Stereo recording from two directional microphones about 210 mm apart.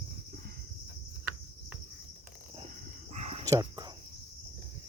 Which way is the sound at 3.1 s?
35° right (ahead or behind).